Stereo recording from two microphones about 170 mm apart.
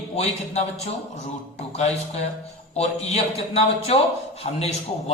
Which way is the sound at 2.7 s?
40° left (ahead or behind).